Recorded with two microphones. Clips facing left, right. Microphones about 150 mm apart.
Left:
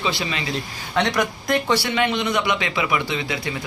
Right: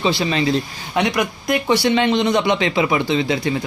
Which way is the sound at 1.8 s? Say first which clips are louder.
Right 6 dB; 25° right (ahead or behind).